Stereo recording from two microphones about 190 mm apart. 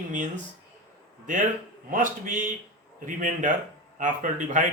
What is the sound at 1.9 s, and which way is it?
A man's voice, 45° right (ahead or behind).